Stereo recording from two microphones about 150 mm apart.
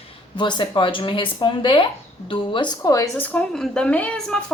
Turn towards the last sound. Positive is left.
turn(degrees=5)  # may be behind; listen again after turning